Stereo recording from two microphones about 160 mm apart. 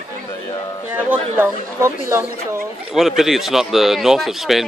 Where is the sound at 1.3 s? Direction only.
15° right (ahead or behind).